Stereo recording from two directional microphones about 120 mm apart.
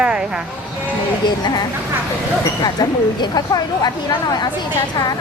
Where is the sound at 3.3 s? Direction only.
35° left (ahead or behind).